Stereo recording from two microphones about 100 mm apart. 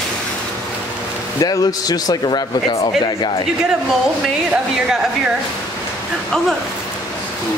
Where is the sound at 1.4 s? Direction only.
40° left (ahead or behind).